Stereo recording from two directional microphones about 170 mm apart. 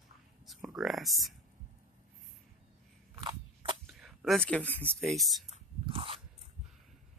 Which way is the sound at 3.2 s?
30° right (ahead or behind).